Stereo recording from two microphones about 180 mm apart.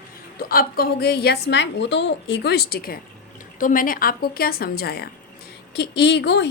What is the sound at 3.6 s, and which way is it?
A woman's voice, 50° left (ahead or behind).